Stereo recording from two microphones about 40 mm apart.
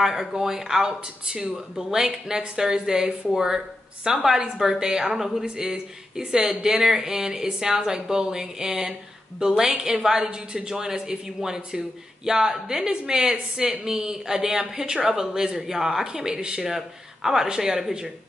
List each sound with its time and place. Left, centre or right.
0.0 s speech: centre
5.4 s speech: centre
16.6 s speech: centre